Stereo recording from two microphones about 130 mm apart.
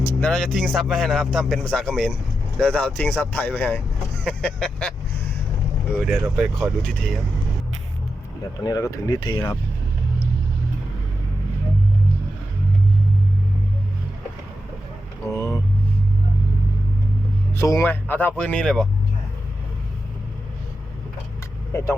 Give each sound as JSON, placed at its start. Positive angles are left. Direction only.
{"t": 0.0, "sound": "speech", "side_deg": 10}
{"t": 6.1, "sound": "speech", "side_deg": -5}
{"t": 8.6, "sound": "speech", "side_deg": 25}
{"t": 15.3, "sound": "speech", "side_deg": 20}
{"t": 17.5, "sound": "speech", "side_deg": 20}
{"t": 21.7, "sound": "speech", "side_deg": 20}